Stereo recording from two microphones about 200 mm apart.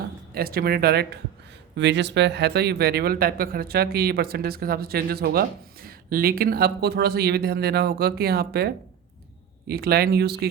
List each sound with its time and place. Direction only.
0.3 s speech: 50° right (ahead or behind)